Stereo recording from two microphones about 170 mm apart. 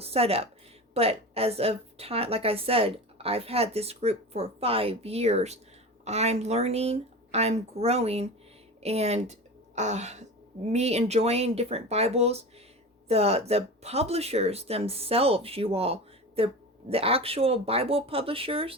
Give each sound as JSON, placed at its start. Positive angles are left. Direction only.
{"t": 0.0, "sound": "a woman's voice", "side_deg": -35}